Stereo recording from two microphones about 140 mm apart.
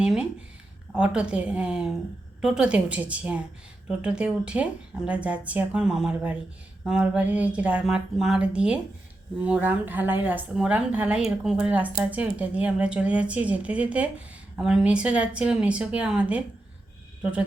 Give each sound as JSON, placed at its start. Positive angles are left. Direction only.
{"t": 0.0, "sound": "a woman's voice", "side_deg": -5}